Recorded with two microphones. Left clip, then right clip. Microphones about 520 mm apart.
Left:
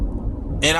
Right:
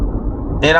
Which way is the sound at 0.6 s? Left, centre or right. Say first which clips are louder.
Right 6 dB; left.